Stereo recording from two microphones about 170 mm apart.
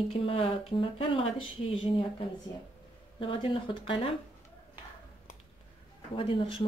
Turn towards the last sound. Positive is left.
turn(degrees=30)  # may be behind; listen again after turning